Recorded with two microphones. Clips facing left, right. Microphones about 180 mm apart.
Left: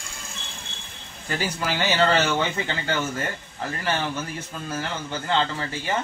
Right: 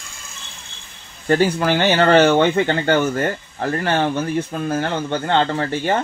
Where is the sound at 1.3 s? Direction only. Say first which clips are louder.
Right 11 dB; 60° right (ahead or behind).